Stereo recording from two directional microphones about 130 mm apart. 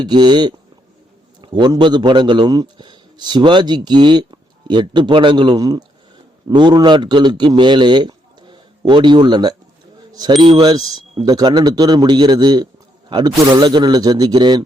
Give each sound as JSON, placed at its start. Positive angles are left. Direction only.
{"t": 0.0, "sound": "a man's voice", "side_deg": -35}
{"t": 10.1, "sound": "a sound", "side_deg": -30}
{"t": 10.4, "sound": "a man's voice", "side_deg": -35}